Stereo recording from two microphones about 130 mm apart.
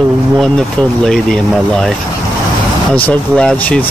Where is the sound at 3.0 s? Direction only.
5° left (ahead or behind).